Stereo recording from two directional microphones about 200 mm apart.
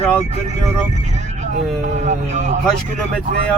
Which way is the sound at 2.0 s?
35° right (ahead or behind).